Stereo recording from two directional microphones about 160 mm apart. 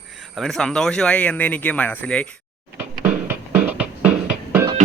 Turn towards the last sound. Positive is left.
turn(degrees=-10)  # may be behind; listen again after turning